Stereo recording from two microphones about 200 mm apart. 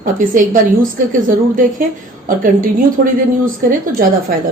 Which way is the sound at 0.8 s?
40° right (ahead or behind).